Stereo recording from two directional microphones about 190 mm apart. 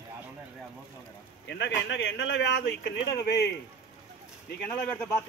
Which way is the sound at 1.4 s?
65° left (ahead or behind).